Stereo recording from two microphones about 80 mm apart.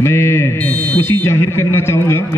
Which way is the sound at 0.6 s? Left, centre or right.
Centre.